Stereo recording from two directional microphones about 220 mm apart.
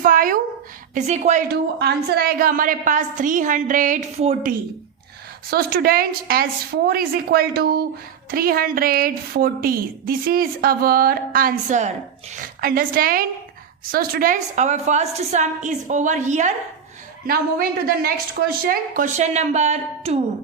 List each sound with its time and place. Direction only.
0.0 s a sound: 40° right (ahead or behind)
0.9 s a woman's voice: 30° right (ahead or behind)
5.5 s a woman's voice: 45° right (ahead or behind)